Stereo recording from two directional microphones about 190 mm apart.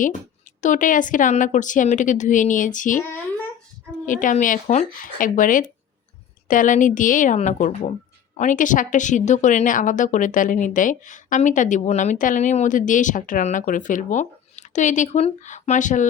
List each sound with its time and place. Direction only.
0.6 s a woman's voice: 45° left (ahead or behind)
4.0 s a woman's voice: 45° left (ahead or behind)